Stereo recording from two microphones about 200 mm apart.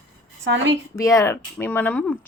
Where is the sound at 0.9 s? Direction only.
15° left (ahead or behind).